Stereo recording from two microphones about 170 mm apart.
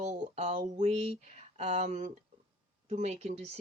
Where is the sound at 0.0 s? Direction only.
40° right (ahead or behind).